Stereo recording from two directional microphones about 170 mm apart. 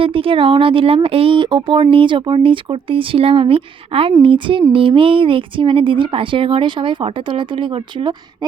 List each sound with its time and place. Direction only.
0.0 s speech: 30° right (ahead or behind)